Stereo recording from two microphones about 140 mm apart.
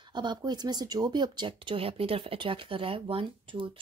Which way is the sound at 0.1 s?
30° right (ahead or behind).